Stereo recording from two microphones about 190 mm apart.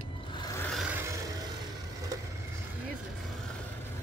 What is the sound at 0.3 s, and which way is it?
Rub, 20° left (ahead or behind).